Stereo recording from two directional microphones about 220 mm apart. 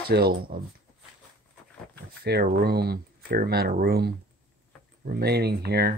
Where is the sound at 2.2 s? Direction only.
45° right (ahead or behind).